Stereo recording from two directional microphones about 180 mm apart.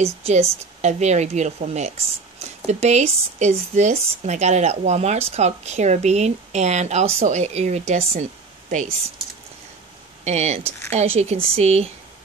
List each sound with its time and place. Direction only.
0.0 s speech: 35° right (ahead or behind)
10.2 s speech: 40° right (ahead or behind)